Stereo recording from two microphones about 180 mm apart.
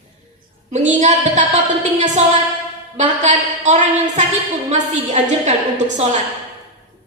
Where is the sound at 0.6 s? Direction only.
40° right (ahead or behind).